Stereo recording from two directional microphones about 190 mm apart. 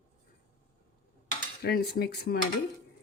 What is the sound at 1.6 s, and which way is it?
Speech, 55° left (ahead or behind).